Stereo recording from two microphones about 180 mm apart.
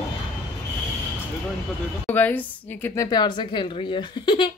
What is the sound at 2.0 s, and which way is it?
A woman's voice, 10° left (ahead or behind).